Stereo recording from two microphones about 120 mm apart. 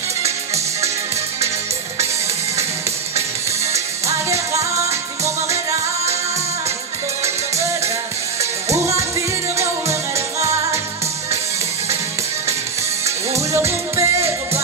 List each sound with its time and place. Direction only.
4.3 s music: 25° right (ahead or behind)
7.5 s music: 25° right (ahead or behind)
13.5 s music: 25° right (ahead or behind)